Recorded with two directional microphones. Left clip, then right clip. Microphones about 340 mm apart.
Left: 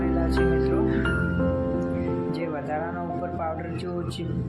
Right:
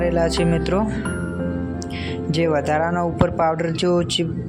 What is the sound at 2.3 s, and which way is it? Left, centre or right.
Speech, right.